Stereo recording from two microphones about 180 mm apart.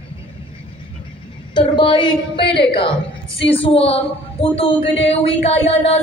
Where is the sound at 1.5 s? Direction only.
25° left (ahead or behind).